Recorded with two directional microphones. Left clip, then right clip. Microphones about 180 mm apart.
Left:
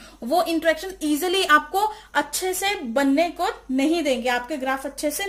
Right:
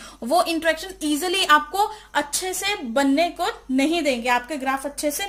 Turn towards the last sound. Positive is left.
turn(degrees=-25)  # may be behind; listen again after turning